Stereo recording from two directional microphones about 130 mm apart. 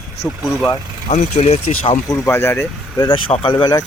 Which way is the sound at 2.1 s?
20° left (ahead or behind).